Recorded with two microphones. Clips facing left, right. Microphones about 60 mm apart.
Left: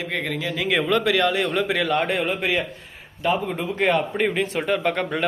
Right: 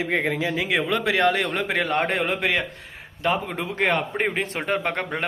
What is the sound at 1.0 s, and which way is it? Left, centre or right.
Speech, right.